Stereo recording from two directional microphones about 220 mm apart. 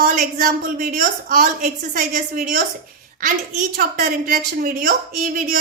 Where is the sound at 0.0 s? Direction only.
40° right (ahead or behind).